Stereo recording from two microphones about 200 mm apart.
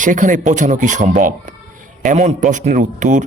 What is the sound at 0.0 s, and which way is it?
A man's voice, 40° right (ahead or behind).